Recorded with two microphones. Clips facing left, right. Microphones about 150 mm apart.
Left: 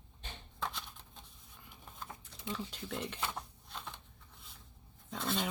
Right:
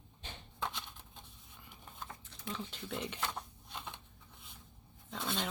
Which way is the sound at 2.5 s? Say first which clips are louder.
Even; 5° left (ahead or behind).